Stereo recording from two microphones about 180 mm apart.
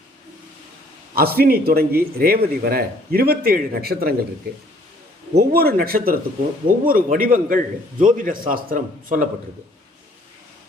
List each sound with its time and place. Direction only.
1.1 s a man's voice: 55° right (ahead or behind)
5.3 s a man's voice: 60° right (ahead or behind)